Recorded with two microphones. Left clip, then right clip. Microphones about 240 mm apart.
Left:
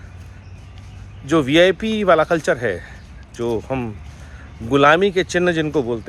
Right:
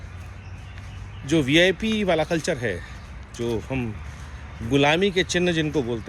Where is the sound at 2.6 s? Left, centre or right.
Left.